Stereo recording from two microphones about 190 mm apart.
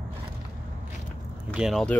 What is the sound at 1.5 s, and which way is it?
Speech, centre (ahead or behind).